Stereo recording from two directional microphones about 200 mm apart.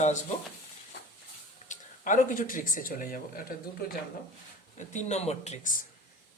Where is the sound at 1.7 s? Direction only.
40° left (ahead or behind).